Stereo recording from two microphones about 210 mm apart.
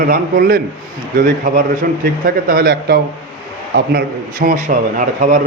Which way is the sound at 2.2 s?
45° right (ahead or behind).